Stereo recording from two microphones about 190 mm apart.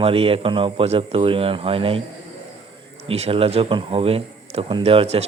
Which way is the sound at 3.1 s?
30° right (ahead or behind).